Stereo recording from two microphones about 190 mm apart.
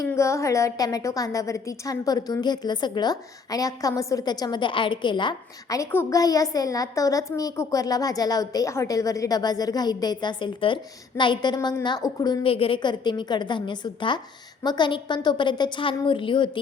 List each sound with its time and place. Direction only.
0.1 s a woman's voice: 15° left (ahead or behind)